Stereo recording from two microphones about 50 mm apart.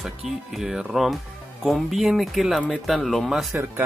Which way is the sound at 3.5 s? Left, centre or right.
Right.